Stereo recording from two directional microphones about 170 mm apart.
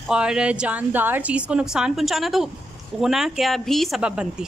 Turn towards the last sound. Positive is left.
turn(degrees=-5)  # may be behind; listen again after turning